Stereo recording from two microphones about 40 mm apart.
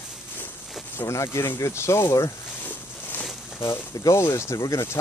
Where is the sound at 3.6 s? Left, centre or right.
Left.